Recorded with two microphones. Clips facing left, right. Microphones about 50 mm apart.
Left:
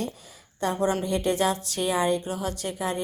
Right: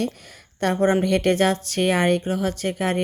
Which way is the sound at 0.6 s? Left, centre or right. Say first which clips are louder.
Right 6 dB; right.